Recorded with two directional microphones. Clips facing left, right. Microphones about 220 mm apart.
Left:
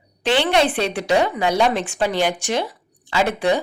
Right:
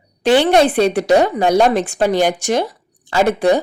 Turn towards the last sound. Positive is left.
turn(degrees=-45)  # may be behind; listen again after turning